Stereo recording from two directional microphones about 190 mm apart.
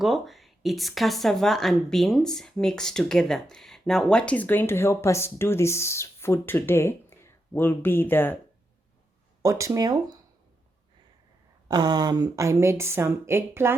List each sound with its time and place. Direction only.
0.0 s speech: centre (ahead or behind)
9.4 s speech: 15° right (ahead or behind)
11.7 s speech: 20° right (ahead or behind)